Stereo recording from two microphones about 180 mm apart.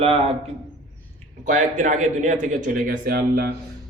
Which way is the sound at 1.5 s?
45° right (ahead or behind).